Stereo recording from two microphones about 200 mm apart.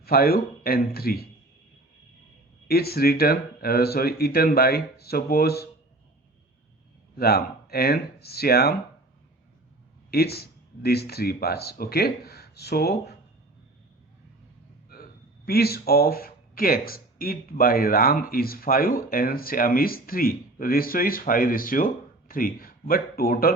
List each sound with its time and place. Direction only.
0.0 s speech: 50° left (ahead or behind)
2.6 s speech: 50° left (ahead or behind)
7.2 s speech: 50° left (ahead or behind)
10.1 s speech: 50° left (ahead or behind)
15.4 s speech: 50° left (ahead or behind)